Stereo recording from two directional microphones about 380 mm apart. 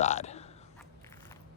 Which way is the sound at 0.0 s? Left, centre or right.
Centre.